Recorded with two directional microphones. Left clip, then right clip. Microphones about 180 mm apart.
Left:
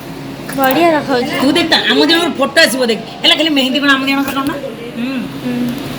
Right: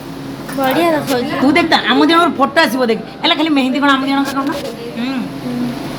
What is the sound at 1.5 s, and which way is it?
A man's voice, 35° right (ahead or behind).